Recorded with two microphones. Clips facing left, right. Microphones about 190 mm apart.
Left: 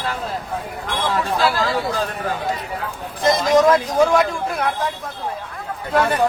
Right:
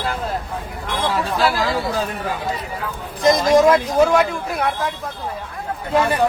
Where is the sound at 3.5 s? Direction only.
10° right (ahead or behind).